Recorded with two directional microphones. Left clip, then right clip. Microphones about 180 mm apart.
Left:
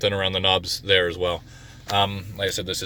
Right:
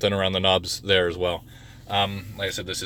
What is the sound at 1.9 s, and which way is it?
Speech, 25° left (ahead or behind).